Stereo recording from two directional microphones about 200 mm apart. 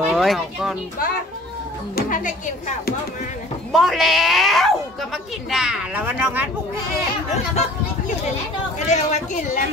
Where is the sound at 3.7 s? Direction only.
Centre (ahead or behind).